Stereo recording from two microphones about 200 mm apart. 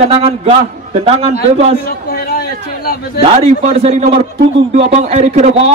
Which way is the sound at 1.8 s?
50° left (ahead or behind).